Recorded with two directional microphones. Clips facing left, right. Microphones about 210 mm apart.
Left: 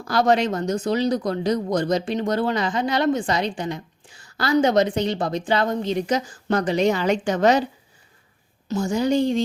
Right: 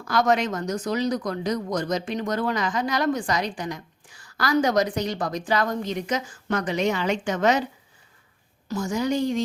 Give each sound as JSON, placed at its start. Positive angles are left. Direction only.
{"t": 0.0, "sound": "speech", "side_deg": 30}
{"t": 8.6, "sound": "speech", "side_deg": 25}